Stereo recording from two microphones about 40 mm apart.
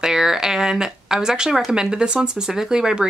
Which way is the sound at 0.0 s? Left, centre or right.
Centre.